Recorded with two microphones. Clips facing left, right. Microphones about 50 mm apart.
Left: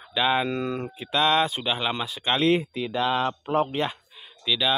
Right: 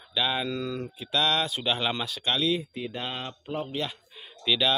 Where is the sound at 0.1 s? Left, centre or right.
Left.